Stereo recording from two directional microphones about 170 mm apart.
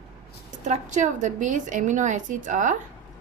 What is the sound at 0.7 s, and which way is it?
A woman's voice, 45° right (ahead or behind).